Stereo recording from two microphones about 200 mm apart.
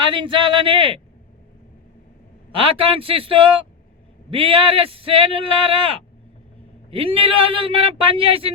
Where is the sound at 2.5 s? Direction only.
25° right (ahead or behind).